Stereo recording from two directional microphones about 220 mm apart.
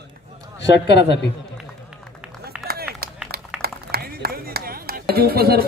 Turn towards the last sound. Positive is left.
turn(degrees=-45)  # may be behind; listen again after turning